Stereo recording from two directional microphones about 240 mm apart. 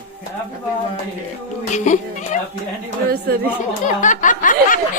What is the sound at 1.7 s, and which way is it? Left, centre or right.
Speech, left.